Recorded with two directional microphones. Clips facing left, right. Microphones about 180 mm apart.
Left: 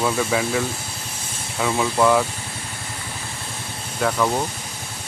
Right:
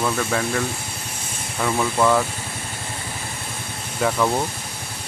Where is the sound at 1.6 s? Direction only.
5° left (ahead or behind).